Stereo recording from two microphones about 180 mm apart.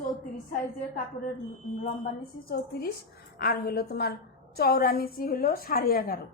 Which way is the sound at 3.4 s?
60° left (ahead or behind).